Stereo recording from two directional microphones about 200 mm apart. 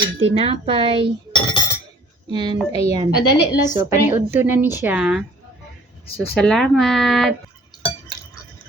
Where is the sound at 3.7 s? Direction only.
10° right (ahead or behind).